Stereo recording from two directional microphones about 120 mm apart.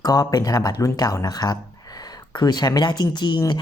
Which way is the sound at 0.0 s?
30° left (ahead or behind).